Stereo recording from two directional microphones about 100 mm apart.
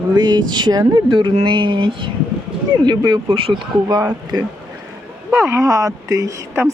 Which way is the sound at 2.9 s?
45° right (ahead or behind).